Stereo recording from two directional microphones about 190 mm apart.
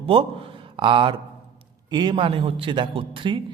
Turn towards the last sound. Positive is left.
turn(degrees=-25)  # may be behind; listen again after turning